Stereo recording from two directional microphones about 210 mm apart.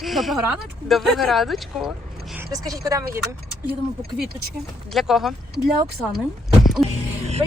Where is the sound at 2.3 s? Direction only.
15° right (ahead or behind).